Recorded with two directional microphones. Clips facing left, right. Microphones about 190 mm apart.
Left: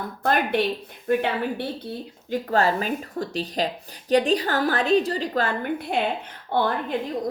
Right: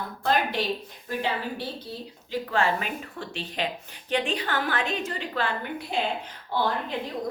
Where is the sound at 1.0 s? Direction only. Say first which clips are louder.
Left 7 dB; 60° left (ahead or behind).